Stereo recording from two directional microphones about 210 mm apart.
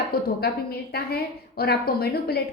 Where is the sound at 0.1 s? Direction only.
45° left (ahead or behind).